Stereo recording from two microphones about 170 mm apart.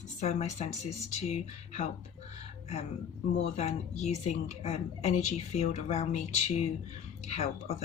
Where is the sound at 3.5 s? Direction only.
40° left (ahead or behind).